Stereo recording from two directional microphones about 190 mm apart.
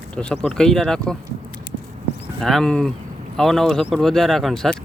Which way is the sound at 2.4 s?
Centre (ahead or behind).